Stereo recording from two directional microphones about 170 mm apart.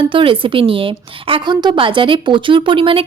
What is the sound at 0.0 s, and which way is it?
Speech, 30° right (ahead or behind).